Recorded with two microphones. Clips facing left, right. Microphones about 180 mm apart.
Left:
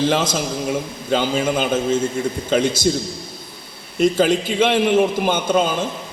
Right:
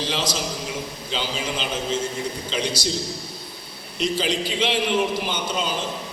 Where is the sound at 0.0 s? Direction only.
50° left (ahead or behind).